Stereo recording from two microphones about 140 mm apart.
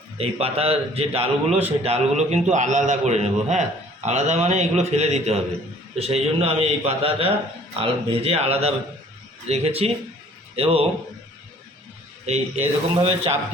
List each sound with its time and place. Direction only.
0.2 s a man's voice: 45° right (ahead or behind)
12.2 s a man's voice: 50° right (ahead or behind)